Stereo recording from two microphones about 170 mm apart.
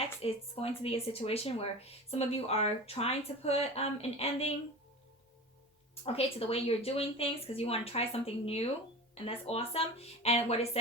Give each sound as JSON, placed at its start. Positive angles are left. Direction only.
{"t": 0.2, "sound": "speech", "side_deg": 35}
{"t": 5.9, "sound": "speech", "side_deg": 35}